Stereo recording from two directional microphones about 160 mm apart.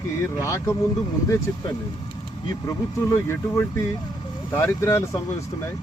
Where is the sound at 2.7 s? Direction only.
15° left (ahead or behind).